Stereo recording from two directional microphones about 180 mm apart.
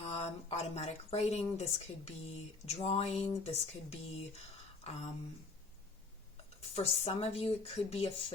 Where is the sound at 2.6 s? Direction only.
35° left (ahead or behind).